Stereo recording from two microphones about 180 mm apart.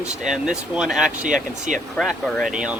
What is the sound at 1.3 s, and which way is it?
Speech, 45° right (ahead or behind).